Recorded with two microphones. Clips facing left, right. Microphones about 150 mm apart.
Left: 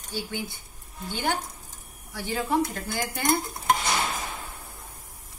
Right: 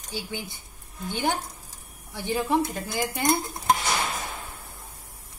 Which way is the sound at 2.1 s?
20° right (ahead or behind).